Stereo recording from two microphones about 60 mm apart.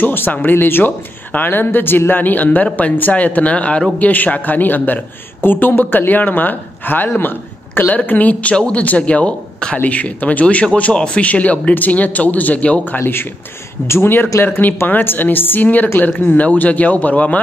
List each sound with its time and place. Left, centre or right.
0.0 s speech: left